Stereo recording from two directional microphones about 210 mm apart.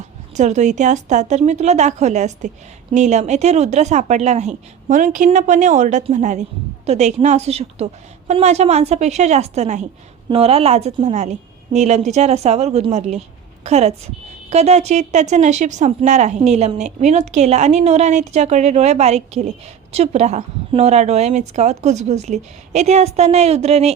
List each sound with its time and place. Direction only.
0.3 s speech: 35° right (ahead or behind)